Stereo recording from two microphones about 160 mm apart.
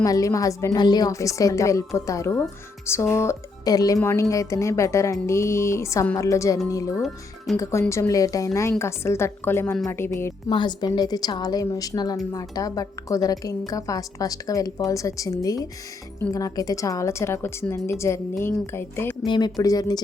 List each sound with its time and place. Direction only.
0.0 s a woman's voice: 20° left (ahead or behind)
10.5 s a woman's voice: 30° left (ahead or behind)
19.2 s a woman's voice: 25° left (ahead or behind)